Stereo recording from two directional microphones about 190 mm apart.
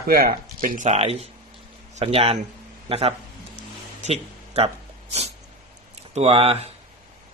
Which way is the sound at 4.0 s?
35° right (ahead or behind).